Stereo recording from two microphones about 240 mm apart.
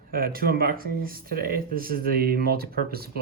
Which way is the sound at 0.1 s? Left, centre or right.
Right.